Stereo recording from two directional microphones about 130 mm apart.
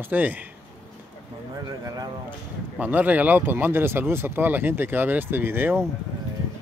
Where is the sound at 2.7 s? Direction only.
15° right (ahead or behind).